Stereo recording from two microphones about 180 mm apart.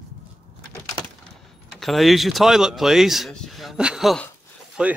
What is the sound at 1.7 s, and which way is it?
Speech, centre (ahead or behind).